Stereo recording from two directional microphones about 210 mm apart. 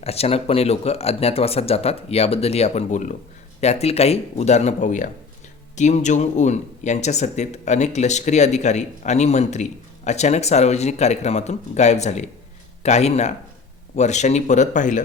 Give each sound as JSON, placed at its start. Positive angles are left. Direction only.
{"t": 0.0, "sound": "speech", "side_deg": 30}